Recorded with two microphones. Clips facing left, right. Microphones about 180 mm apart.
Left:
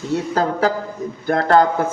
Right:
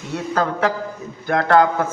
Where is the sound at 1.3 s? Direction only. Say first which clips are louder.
Left 1 dB; 35° left (ahead or behind).